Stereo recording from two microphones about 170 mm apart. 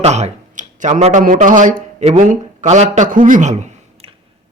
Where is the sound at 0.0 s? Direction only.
40° right (ahead or behind).